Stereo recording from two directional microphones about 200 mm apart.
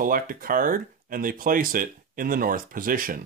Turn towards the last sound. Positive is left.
turn(degrees=-45)  # may be behind; listen again after turning